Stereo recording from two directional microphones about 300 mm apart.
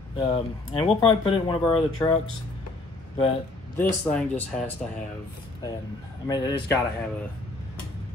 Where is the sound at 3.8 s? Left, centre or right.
Centre.